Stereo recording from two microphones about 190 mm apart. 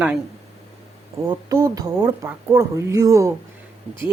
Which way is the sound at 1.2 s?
20° right (ahead or behind).